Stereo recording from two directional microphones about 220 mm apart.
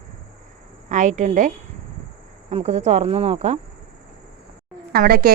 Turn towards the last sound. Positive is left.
turn(degrees=-40)  # may be behind; listen again after turning